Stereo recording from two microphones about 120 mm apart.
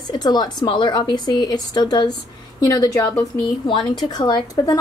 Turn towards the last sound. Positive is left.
turn(degrees=35)  # may be behind; listen again after turning